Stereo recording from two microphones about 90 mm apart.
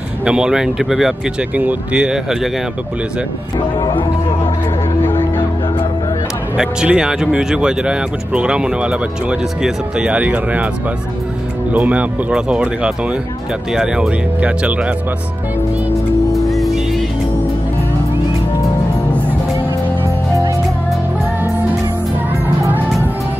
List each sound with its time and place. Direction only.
0.2 s speech: 10° right (ahead or behind)
1.5 s speech: 20° right (ahead or behind)
3.5 s speech: 55° left (ahead or behind)
5.0 s music: 25° left (ahead or behind)
6.5 s speech: 10° right (ahead or behind)
11.7 s speech: 15° right (ahead or behind)
16.4 s music: centre (ahead or behind)